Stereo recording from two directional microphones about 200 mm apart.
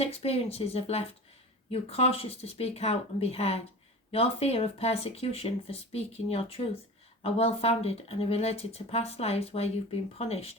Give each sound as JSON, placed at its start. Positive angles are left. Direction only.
{"t": 0.0, "sound": "speech", "side_deg": 30}